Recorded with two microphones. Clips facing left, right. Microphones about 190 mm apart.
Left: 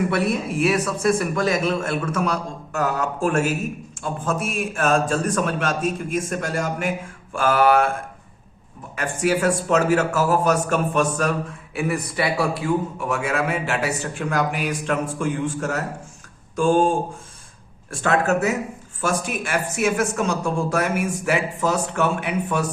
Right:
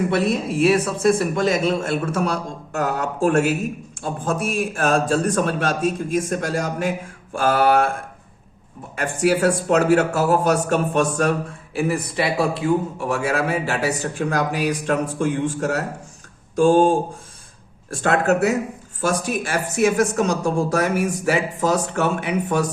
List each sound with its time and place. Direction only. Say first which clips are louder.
0.1 s a man's voice: right 2 dB; 25° right (ahead or behind)
9.0 s a man's voice: right 2 dB; 35° right (ahead or behind)
16.6 s a man's voice: right 3 dB; 35° right (ahead or behind)